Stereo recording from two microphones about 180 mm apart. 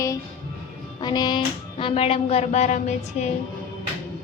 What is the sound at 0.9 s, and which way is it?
A woman's voice, 25° left (ahead or behind).